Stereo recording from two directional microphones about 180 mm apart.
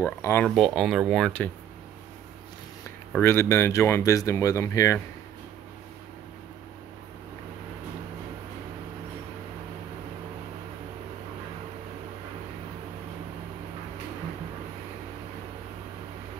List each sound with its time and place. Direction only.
0.0 s speech: 15° left (ahead or behind)
0.6 s speech: centre (ahead or behind)
3.1 s speech: 10° left (ahead or behind)